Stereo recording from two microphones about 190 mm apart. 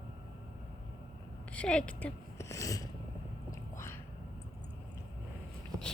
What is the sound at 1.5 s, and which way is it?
Speech, 5° left (ahead or behind).